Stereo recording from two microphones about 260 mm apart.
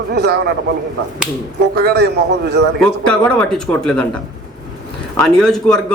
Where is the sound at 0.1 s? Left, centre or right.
Right.